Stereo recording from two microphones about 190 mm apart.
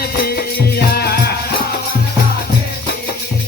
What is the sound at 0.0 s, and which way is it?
Music, 55° left (ahead or behind).